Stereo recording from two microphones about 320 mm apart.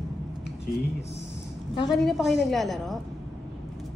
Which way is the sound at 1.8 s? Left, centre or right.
Centre.